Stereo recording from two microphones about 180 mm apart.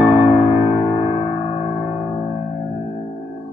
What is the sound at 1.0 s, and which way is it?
Music, 35° left (ahead or behind).